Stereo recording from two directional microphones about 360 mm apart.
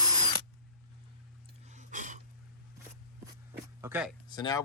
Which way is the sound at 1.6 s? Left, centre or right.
Centre.